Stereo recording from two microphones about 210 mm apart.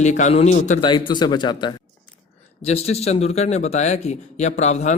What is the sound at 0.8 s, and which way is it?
Speech, 20° left (ahead or behind).